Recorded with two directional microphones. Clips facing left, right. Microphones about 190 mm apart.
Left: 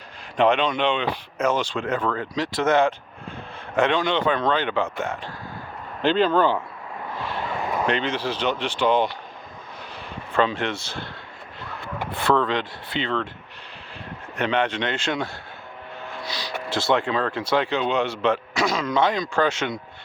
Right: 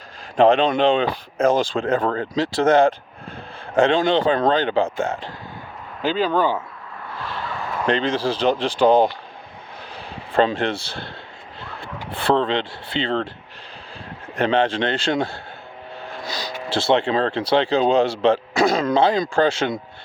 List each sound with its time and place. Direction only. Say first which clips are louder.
0.3 s speech: right 5 dB; 35° right (ahead or behind)
6.0 s speech: left 1 dB; 5° right (ahead or behind)
7.5 s a sound: left 3 dB; 15° left (ahead or behind)
7.9 s speech: right 8 dB; 35° right (ahead or behind)
10.3 s speech: right 4 dB; 35° right (ahead or behind)
12.1 s speech: right 2 dB; 30° right (ahead or behind)
14.3 s speech: right 4 dB; 30° right (ahead or behind)